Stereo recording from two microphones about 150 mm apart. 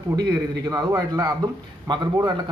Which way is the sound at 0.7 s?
25° right (ahead or behind).